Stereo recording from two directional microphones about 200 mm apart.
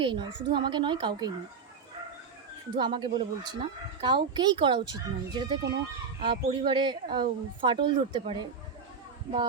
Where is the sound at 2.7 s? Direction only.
25° right (ahead or behind).